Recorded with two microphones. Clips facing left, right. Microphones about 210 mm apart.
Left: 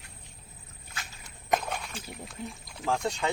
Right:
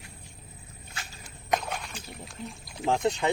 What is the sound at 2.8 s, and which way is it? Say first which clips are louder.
Speech: right 4 dB; 20° right (ahead or behind).